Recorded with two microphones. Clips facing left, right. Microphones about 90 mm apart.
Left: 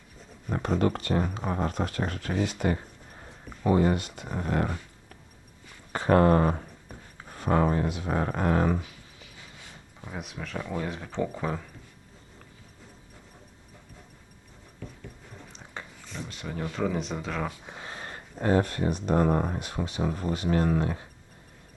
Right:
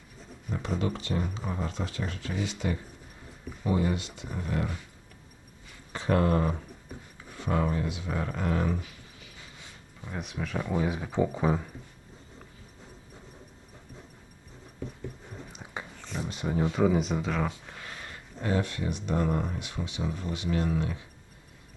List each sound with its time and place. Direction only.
0.5 s speech: 55° left (ahead or behind)
5.9 s speech: 50° left (ahead or behind)
10.1 s speech: centre (ahead or behind)
15.5 s biting: 10° right (ahead or behind)
16.0 s a sound: 5° right (ahead or behind)
16.3 s speech: 20° right (ahead or behind); by 17.5 s centre (ahead or behind)
17.7 s speech: 25° left (ahead or behind); by 21.1 s 45° left (ahead or behind)